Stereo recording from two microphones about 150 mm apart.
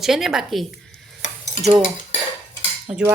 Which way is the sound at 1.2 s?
60° left (ahead or behind).